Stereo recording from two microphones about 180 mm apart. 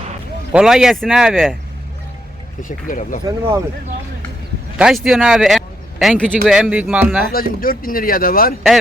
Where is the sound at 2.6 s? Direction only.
45° left (ahead or behind).